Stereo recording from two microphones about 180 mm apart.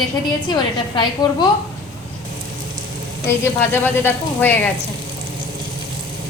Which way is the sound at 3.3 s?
10° left (ahead or behind).